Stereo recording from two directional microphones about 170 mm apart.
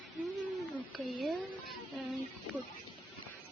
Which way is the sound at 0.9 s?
Centre (ahead or behind).